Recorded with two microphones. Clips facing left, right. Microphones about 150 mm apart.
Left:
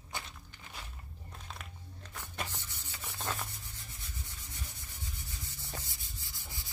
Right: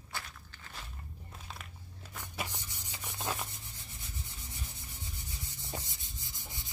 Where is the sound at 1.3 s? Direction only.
Centre (ahead or behind).